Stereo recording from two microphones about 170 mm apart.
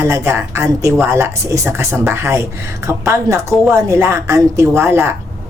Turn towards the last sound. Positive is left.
turn(degrees=-15)  # may be behind; listen again after turning